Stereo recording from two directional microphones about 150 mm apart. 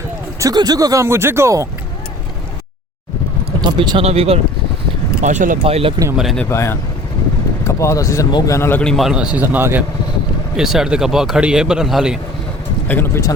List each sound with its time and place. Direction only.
0.3 s speech: 25° right (ahead or behind)
3.6 s speech: 30° right (ahead or behind)
5.2 s speech: 55° right (ahead or behind)
5.6 s speech: 40° right (ahead or behind)
6.1 s a man's voice: 5° left (ahead or behind)
6.5 s speech: 20° left (ahead or behind)
8.8 s a man's voice: centre (ahead or behind)
12.9 s speech: 15° left (ahead or behind)